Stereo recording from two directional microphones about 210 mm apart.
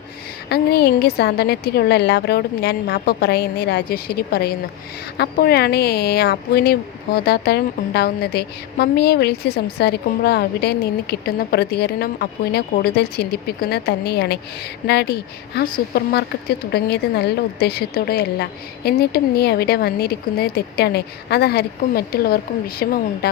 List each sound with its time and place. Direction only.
0.4 s speech: 50° left (ahead or behind)